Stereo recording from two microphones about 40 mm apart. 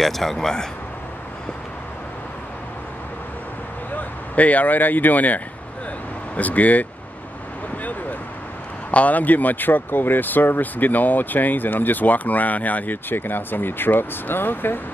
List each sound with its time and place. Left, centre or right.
0.0 s speech: centre
3.9 s speech: left
8.9 s speech: left